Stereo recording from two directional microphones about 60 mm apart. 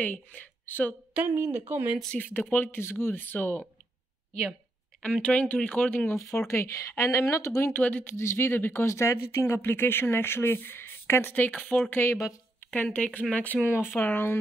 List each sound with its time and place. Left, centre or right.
0.0 s speech: left
1.3 s speech: right
2.1 s speech: left
5.0 s speech: left
6.1 s speech: left
7.7 s speech: left
8.2 s speech: left
8.8 s speech: left
12.7 s speech: left
13.9 s speech: left